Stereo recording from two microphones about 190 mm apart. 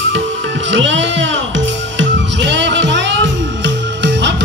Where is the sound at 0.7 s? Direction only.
75° right (ahead or behind).